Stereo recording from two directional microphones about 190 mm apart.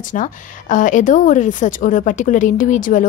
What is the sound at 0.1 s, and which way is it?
A woman's voice, 45° left (ahead or behind).